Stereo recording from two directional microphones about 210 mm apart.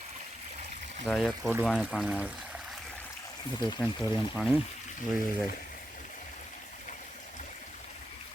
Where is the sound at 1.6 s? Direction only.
5° right (ahead or behind).